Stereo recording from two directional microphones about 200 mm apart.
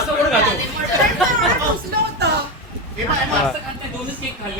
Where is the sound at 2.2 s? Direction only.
55° right (ahead or behind).